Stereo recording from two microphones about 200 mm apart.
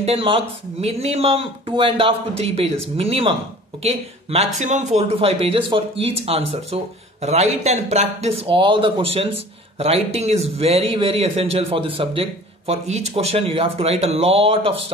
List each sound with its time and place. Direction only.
0.0 s speech: 30° right (ahead or behind)